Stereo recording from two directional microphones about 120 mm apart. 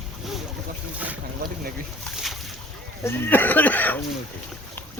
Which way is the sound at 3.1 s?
20° left (ahead or behind).